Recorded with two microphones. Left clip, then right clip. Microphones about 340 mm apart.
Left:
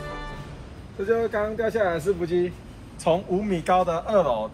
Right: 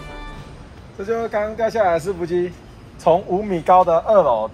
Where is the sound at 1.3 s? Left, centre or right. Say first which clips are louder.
Right 5 dB; right.